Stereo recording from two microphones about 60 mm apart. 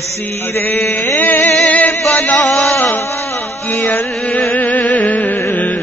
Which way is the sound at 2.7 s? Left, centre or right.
Left.